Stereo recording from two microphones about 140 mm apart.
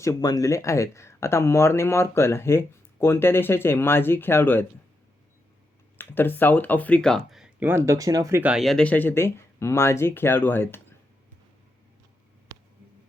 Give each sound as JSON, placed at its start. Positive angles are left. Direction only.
{"t": 0.0, "sound": "speech", "side_deg": 25}
{"t": 6.0, "sound": "speech", "side_deg": 15}
{"t": 7.6, "sound": "speech", "side_deg": -15}
{"t": 8.4, "sound": "speech", "side_deg": -5}
{"t": 12.5, "sound": "a sound", "side_deg": -25}